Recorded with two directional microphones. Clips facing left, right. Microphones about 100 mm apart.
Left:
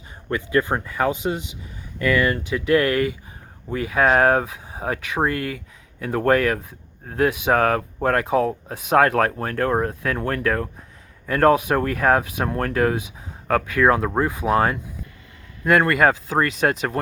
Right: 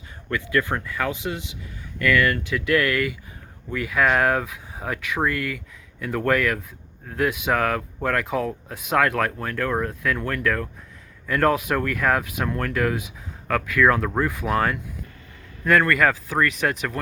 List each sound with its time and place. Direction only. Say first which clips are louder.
0.3 s speech: left 3 dB; 25° left (ahead or behind)